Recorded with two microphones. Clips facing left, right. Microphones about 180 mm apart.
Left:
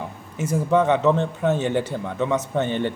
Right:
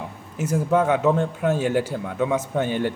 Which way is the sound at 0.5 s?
5° right (ahead or behind).